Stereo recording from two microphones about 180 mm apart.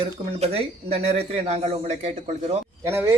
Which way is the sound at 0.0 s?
35° right (ahead or behind).